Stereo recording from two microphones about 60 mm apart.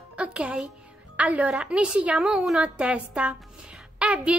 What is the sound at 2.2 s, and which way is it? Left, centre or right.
A woman's voice, centre.